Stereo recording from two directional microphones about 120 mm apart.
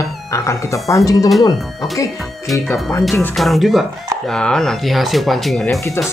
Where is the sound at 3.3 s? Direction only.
Centre (ahead or behind).